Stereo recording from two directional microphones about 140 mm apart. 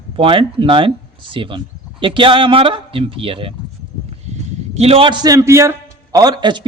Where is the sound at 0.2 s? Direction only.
40° right (ahead or behind).